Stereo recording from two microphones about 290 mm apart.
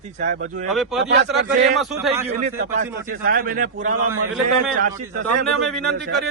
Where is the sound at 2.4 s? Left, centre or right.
Right.